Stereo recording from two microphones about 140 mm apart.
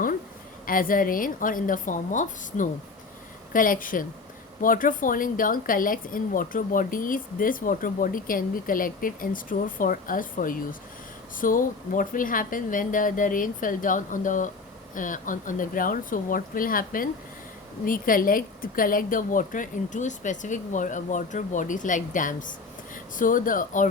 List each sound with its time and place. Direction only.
0.6 s a woman's voice: 80° left; by 2.6 s 65° left (ahead or behind)
3.5 s a woman's voice: 80° left